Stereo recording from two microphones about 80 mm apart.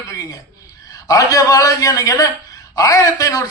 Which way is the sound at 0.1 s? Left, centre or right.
Left.